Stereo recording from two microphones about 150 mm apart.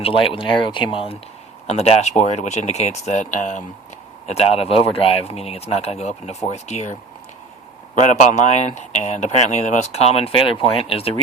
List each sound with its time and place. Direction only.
0.0 s speech: 35° left (ahead or behind); by 3.6 s 55° left (ahead or behind)
4.3 s speech: 40° left (ahead or behind)
7.9 s speech: 55° left (ahead or behind)